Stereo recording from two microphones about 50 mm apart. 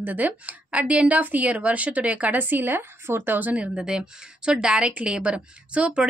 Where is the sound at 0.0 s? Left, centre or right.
Right.